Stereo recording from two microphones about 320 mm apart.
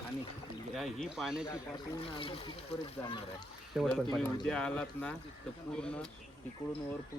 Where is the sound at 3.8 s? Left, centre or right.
Centre.